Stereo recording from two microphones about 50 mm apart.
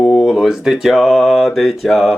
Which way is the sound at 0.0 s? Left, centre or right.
Centre.